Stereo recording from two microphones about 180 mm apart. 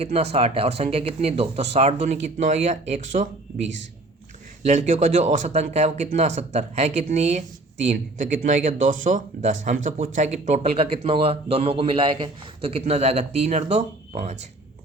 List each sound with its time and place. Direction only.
0.0 s speech: 35° right (ahead or behind)